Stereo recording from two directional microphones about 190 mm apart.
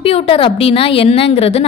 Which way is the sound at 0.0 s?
30° left (ahead or behind).